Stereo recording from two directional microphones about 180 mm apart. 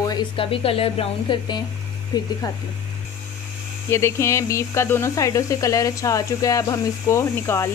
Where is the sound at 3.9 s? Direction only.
15° left (ahead or behind).